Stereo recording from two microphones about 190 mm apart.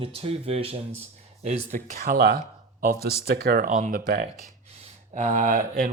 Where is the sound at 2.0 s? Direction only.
55° right (ahead or behind).